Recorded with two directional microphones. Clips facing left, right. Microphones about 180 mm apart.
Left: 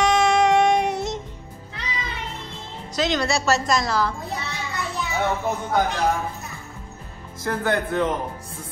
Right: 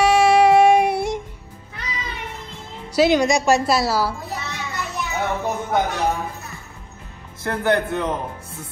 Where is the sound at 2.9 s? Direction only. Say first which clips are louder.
Right 7 dB; 10° right (ahead or behind).